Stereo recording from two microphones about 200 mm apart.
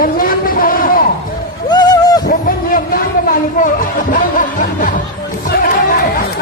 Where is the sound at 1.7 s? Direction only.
20° left (ahead or behind).